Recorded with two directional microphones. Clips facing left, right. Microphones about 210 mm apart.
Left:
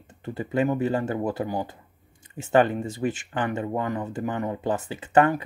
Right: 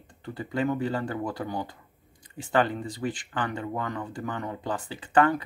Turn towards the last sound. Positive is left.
turn(degrees=20)  # may be behind; listen again after turning